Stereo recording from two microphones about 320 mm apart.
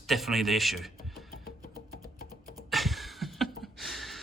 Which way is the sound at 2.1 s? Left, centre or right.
Left.